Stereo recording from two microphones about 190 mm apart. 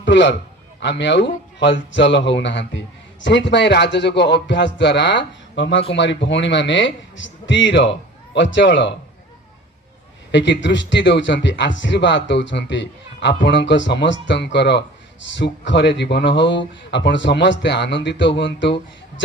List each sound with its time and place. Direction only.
0.0 s a man's voice: 70° left (ahead or behind)
10.3 s speech: 70° left (ahead or behind)